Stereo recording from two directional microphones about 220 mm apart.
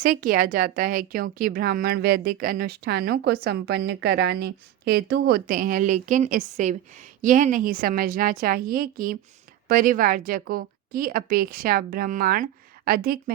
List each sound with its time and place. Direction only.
0.0 s a woman's voice: 40° right (ahead or behind)